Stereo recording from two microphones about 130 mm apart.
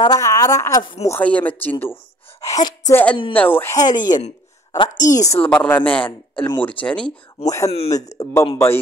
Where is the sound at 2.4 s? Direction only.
30° left (ahead or behind).